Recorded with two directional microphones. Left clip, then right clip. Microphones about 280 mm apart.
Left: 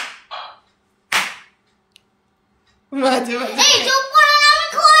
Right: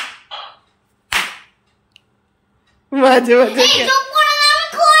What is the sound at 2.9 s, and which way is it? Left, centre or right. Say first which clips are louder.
Speech: right 8 dB; centre.